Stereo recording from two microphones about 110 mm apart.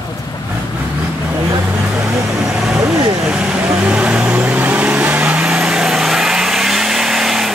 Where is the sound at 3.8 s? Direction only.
10° right (ahead or behind).